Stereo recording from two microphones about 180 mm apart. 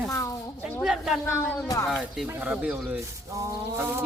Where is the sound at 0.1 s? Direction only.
15° left (ahead or behind).